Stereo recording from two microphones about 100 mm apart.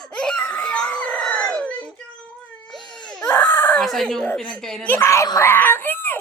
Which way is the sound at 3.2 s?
20° left (ahead or behind).